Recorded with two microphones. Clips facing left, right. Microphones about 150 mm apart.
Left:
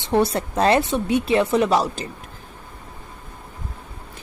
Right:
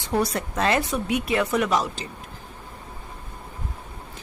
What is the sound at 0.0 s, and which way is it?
A woman's voice, 25° left (ahead or behind).